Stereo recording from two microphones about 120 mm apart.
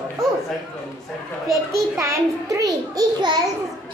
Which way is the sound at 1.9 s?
25° right (ahead or behind).